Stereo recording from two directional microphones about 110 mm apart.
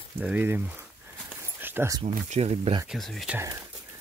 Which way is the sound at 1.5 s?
20° right (ahead or behind).